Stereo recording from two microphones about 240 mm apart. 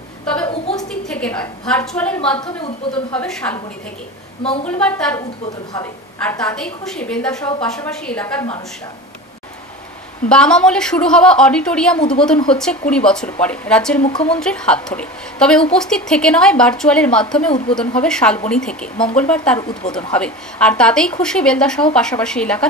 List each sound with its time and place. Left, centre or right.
0.5 s a sound: left
1.0 s a woman's voice: centre
4.4 s a woman's voice: left
4.6 s a woman's voice: centre
5.7 s a woman's voice: centre
6.4 s a woman's voice: centre
10.2 s a woman's voice: centre
14.0 s a woman's voice: left
14.3 s a woman's voice: centre
19.6 s a woman's voice: centre
19.9 s a woman's voice: centre